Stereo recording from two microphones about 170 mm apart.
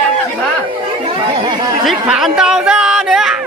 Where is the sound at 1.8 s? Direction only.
Centre (ahead or behind).